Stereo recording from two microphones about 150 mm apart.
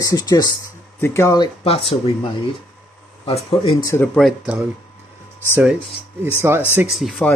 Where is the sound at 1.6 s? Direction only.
40° left (ahead or behind).